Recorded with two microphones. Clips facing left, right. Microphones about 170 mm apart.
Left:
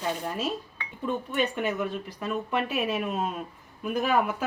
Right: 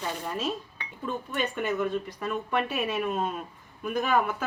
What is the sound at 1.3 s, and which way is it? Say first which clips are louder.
Speech: even; 5° left (ahead or behind).